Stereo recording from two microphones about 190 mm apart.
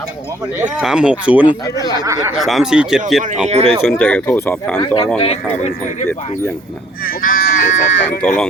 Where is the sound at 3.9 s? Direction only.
5° left (ahead or behind).